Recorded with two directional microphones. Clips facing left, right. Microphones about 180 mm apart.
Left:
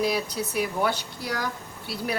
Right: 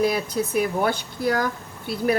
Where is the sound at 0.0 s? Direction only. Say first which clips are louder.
Right 4 dB; 50° right (ahead or behind).